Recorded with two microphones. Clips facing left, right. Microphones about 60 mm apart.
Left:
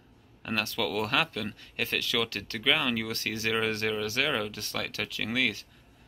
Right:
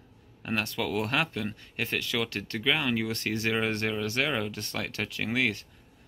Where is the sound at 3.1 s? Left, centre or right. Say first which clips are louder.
Right 1 dB; right.